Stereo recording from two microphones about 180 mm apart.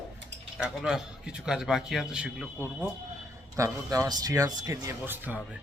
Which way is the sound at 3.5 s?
15° right (ahead or behind).